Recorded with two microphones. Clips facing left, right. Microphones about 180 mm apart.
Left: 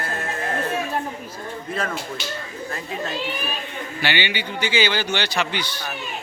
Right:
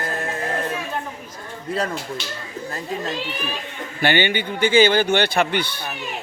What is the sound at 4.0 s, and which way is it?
Speech, 50° right (ahead or behind).